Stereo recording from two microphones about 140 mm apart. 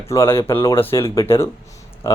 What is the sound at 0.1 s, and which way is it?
Speech, 20° left (ahead or behind).